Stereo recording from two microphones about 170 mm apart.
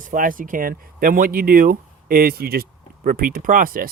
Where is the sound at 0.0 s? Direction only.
55° right (ahead or behind).